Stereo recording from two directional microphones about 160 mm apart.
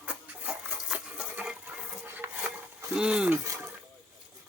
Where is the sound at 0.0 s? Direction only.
10° right (ahead or behind).